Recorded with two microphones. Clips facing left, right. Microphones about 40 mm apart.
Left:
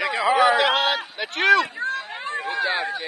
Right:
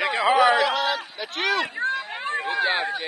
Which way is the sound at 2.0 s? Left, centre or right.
Centre.